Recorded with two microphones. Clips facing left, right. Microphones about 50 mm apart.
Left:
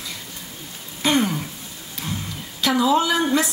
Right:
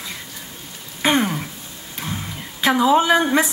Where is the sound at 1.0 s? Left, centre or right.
Right.